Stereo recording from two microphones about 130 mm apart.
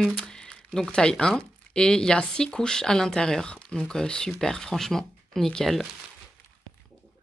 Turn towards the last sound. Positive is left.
turn(degrees=0)  # may be behind; listen again after turning